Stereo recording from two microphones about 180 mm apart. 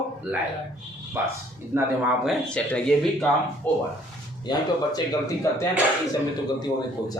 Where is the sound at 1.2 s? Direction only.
15° right (ahead or behind).